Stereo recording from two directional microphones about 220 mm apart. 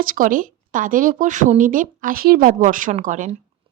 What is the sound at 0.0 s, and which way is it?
A woman's voice, 40° right (ahead or behind).